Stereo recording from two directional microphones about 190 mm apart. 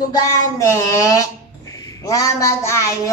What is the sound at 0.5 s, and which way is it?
Child singing, 15° left (ahead or behind).